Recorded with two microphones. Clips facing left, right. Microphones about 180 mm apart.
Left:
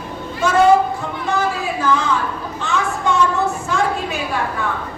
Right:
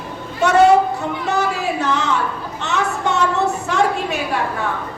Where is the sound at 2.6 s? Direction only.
70° right (ahead or behind).